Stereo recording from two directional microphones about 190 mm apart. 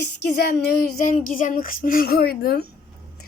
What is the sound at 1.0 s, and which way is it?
A woman's voice, 45° left (ahead or behind).